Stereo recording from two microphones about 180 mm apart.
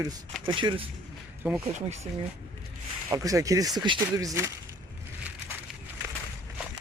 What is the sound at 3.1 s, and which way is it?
Speech, 20° right (ahead or behind).